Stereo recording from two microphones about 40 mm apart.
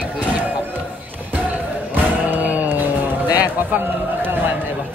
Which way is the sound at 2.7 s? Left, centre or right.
Right.